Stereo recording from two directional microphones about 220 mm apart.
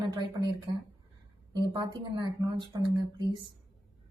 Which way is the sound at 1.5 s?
20° right (ahead or behind).